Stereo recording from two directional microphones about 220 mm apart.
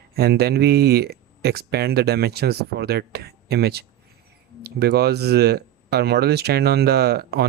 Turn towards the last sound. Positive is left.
turn(degrees=-45)  # may be behind; listen again after turning